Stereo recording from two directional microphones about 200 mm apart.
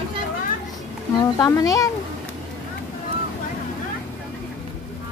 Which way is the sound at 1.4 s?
15° left (ahead or behind).